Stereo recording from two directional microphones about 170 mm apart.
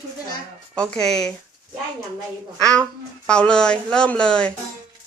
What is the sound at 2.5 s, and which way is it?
A child's voice, 5° left (ahead or behind).